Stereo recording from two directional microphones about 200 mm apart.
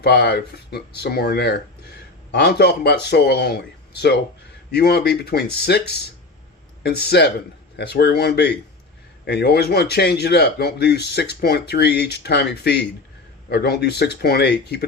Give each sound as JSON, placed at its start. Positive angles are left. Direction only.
{"t": 0.0, "sound": "speech", "side_deg": 55}